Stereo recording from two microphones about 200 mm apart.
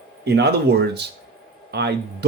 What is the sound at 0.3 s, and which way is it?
Speech, 55° right (ahead or behind).